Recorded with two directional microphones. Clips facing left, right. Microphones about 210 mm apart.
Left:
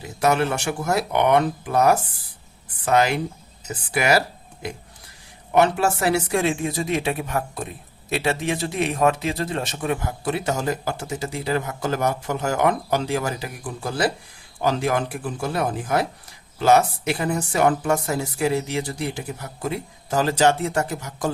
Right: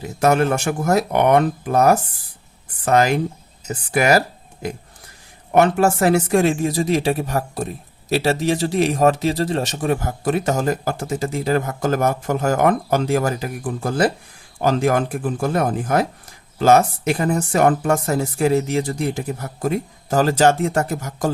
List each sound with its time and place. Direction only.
0.2 s speech: 45° right (ahead or behind)
5.5 s speech: 45° right (ahead or behind)